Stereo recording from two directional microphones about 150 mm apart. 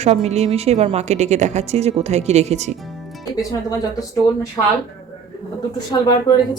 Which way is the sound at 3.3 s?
25° left (ahead or behind).